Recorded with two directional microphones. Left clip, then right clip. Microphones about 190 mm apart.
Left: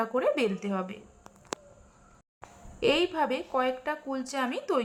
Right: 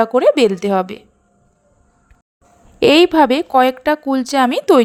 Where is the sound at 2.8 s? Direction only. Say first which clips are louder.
Right 16 dB; 45° right (ahead or behind).